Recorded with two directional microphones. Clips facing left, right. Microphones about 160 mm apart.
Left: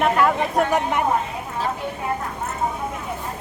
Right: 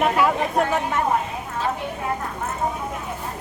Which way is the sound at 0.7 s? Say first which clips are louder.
Left 2 dB; 15° left (ahead or behind).